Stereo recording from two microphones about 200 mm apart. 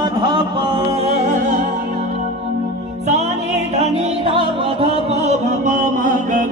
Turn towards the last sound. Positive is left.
turn(degrees=-40)  # may be behind; listen again after turning